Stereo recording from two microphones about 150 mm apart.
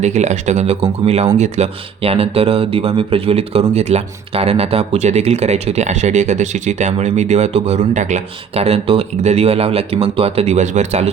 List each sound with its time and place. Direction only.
0.0 s speech: 50° right (ahead or behind)